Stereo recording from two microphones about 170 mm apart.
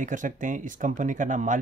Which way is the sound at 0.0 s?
50° right (ahead or behind).